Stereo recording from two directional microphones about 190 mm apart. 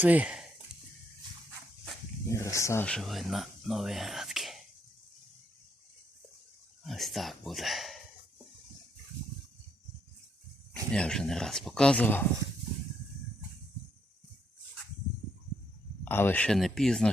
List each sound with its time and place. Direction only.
0.0 s speech: 5° right (ahead or behind)
2.3 s speech: 15° left (ahead or behind); by 4.6 s centre (ahead or behind)
6.8 s speech: centre (ahead or behind)
10.9 s speech: 5° left (ahead or behind)
16.0 s speech: 10° left (ahead or behind)